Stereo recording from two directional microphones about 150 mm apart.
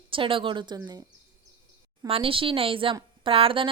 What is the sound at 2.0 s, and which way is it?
A woman's voice, 40° right (ahead or behind).